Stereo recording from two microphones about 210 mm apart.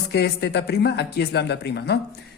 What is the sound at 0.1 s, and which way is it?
Speech, 50° left (ahead or behind).